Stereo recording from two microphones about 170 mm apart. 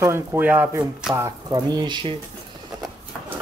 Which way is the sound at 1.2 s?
20° right (ahead or behind).